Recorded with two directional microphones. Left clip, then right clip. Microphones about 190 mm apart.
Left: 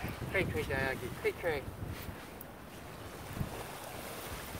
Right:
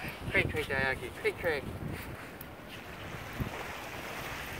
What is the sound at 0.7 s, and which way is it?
Speech, 20° left (ahead or behind).